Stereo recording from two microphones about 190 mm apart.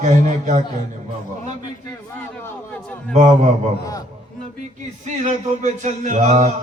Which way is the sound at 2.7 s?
5° left (ahead or behind).